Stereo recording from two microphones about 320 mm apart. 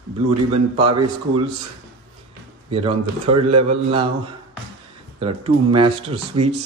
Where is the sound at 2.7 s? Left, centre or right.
Centre.